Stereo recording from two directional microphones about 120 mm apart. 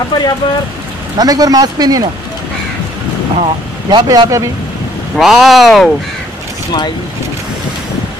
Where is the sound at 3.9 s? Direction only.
35° right (ahead or behind).